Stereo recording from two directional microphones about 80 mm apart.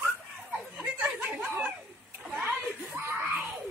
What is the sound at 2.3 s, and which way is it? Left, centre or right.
Screaming, right.